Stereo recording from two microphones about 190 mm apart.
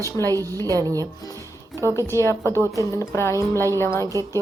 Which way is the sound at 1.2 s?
20° left (ahead or behind).